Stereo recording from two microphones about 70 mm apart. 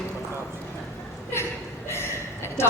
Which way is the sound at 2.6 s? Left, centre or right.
Left.